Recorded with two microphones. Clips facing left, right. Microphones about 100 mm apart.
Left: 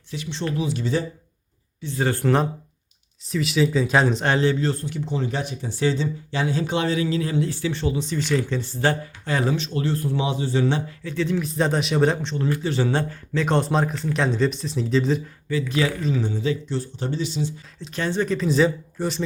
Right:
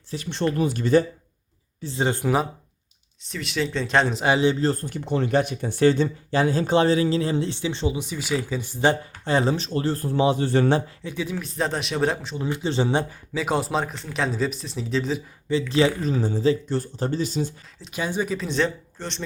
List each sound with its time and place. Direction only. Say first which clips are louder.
0.1 s speech: right 1 dB; 40° right (ahead or behind)
0.5 s speech: right 5 dB; 50° right (ahead or behind)
2.0 s speech: left 1 dB; 20° right (ahead or behind)
3.2 s speech: left 6 dB; centre (ahead or behind)
4.6 s speech: right 1 dB; 45° right (ahead or behind); by 9.0 s 15° right (ahead or behind)
9.2 s speech: right 2 dB; 30° right (ahead or behind)
10.4 s speech: right 2 dB; 55° right (ahead or behind)
11.0 s speech: left 5 dB; 10° right (ahead or behind)
11.3 s speech: left 3 dB; centre (ahead or behind)
12.5 s speech: even; 25° right (ahead or behind); by 15.2 s centre (ahead or behind)
15.7 s speech: right 4 dB; 25° right (ahead or behind)
16.0 s speech: right 1 dB; 40° right (ahead or behind)
16.7 s speech: right 2 dB; 45° right (ahead or behind)
17.7 s speech: left 2 dB; 10° right (ahead or behind); by 19.2 s 5° left (ahead or behind)